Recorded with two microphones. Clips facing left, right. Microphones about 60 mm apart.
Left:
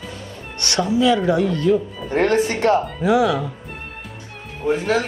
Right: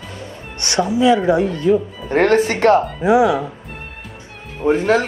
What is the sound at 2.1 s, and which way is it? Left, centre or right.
Speech, right.